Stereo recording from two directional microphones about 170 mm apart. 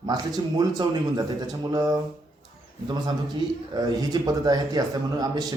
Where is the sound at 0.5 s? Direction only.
25° right (ahead or behind).